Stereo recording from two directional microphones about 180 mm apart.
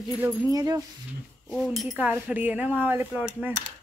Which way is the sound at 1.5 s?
Centre (ahead or behind).